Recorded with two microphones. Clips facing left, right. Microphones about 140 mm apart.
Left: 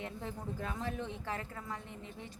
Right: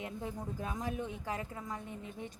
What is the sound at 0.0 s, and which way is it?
A woman's voice, 15° right (ahead or behind).